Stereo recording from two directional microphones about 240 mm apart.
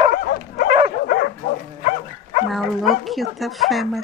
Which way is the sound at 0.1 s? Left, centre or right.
Left.